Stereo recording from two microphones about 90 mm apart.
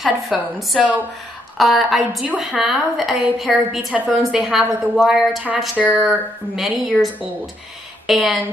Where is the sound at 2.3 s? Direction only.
10° right (ahead or behind); by 5.9 s 5° left (ahead or behind).